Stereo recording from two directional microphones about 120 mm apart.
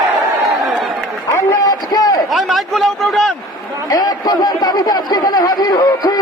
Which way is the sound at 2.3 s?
Centre (ahead or behind).